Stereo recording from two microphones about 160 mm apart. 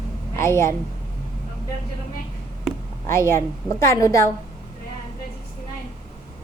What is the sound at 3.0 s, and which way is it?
A woman's voice, 15° left (ahead or behind).